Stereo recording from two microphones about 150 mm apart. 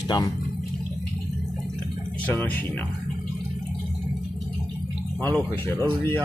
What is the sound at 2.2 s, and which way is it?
Speech, 10° left (ahead or behind).